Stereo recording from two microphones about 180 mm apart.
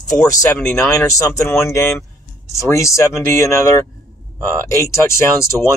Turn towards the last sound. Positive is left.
turn(degrees=15)  # may be behind; listen again after turning